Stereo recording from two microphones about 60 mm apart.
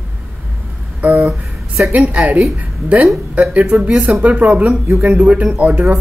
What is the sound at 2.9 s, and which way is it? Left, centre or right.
Speech, right.